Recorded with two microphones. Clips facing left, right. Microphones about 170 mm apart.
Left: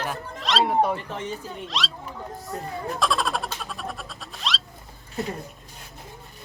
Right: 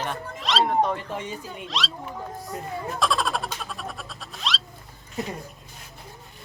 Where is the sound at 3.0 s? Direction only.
Centre (ahead or behind).